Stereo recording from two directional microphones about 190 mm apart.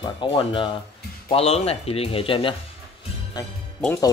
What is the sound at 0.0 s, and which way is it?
Speech, 25° left (ahead or behind).